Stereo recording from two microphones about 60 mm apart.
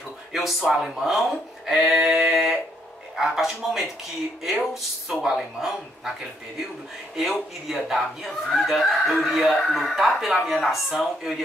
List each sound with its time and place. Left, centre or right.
0.3 s speech: centre
7.6 s speech: centre